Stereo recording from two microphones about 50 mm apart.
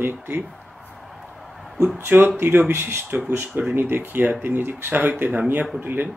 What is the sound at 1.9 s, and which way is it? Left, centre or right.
Speech, right.